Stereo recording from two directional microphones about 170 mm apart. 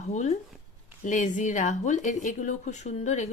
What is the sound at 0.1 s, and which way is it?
Speech, 45° left (ahead or behind).